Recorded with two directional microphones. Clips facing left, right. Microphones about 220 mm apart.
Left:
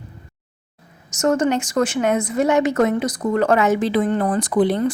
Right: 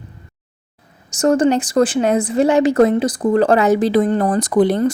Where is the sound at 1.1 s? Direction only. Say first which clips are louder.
Right 4 dB; 30° right (ahead or behind).